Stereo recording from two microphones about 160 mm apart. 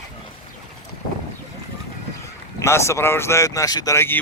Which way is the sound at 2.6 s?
15° left (ahead or behind).